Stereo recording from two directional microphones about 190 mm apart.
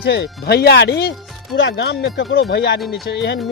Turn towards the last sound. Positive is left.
turn(degrees=65)  # may be behind; listen again after turning